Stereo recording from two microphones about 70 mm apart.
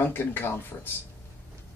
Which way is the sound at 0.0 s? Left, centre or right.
Left.